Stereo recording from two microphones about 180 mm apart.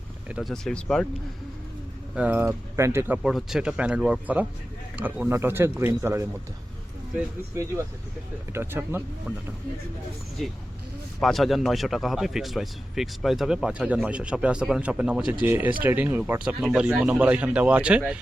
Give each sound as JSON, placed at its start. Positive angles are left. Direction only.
{"t": 0.3, "sound": "speech", "side_deg": -5}
{"t": 2.1, "sound": "speech", "side_deg": -10}
{"t": 3.2, "sound": "speech", "side_deg": -5}
{"t": 7.5, "sound": "speech", "side_deg": -15}
{"t": 10.4, "sound": "speech", "side_deg": 0}